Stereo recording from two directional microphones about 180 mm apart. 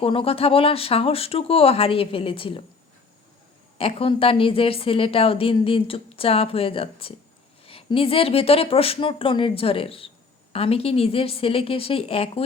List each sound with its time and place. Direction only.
0.0 s a woman's voice: 30° left (ahead or behind)
3.8 s a woman's voice: 30° left (ahead or behind)